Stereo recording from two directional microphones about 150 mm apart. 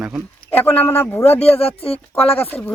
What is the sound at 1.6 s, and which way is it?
Speech, 40° left (ahead or behind).